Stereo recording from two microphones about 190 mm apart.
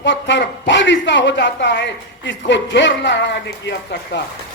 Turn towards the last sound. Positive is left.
turn(degrees=65)  # may be behind; listen again after turning